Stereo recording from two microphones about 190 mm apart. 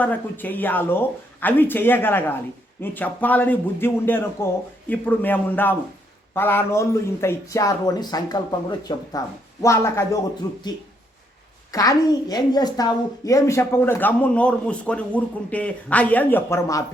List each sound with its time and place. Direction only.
0.0 s a woman's voice: 10° left (ahead or behind)
11.7 s a woman's voice: 20° left (ahead or behind)